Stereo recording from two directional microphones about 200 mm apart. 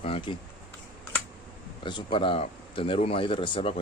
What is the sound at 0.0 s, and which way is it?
Speech, 25° left (ahead or behind).